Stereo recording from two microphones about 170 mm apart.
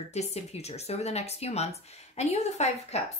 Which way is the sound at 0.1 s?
40° left (ahead or behind).